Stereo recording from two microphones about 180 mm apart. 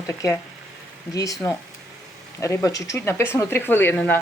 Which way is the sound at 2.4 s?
15° left (ahead or behind).